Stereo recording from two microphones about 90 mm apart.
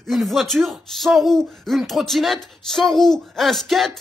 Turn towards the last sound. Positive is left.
turn(degrees=0)  # may be behind; listen again after turning